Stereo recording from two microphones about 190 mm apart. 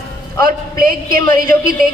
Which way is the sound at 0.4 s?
50° right (ahead or behind).